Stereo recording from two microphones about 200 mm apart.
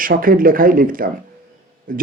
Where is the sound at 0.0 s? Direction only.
45° right (ahead or behind).